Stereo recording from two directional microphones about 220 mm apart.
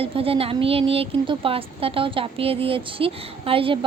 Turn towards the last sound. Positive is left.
turn(degrees=-25)  # may be behind; listen again after turning